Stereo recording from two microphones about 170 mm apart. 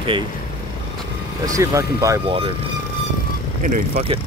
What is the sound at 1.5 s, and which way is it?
Speech, 20° right (ahead or behind).